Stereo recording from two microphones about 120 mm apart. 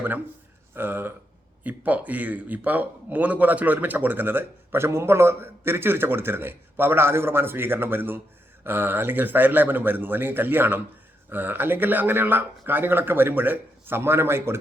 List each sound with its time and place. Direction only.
0.7 s a man's voice: 15° right (ahead or behind)